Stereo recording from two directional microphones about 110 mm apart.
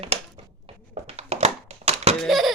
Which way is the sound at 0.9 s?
70° right (ahead or behind).